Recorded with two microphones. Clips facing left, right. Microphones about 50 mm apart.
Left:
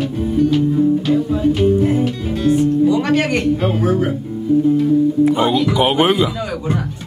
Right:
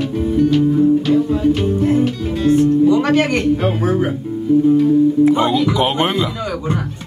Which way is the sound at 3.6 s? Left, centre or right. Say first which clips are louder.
Even; centre.